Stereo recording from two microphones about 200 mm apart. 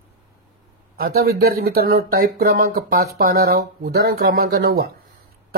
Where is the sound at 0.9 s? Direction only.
50° right (ahead or behind).